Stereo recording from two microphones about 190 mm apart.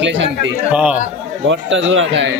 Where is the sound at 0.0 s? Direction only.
70° right (ahead or behind).